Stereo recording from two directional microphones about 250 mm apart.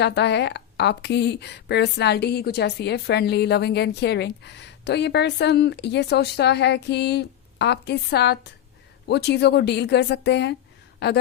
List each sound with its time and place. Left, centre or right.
0.0 s a woman's voice: left